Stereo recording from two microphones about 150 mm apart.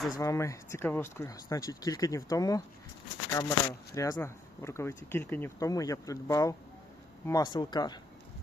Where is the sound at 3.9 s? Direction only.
20° left (ahead or behind).